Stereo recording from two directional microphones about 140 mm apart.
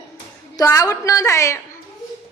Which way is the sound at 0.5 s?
25° left (ahead or behind).